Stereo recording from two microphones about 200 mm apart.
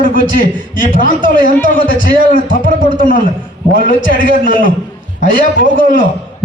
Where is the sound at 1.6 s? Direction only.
45° left (ahead or behind).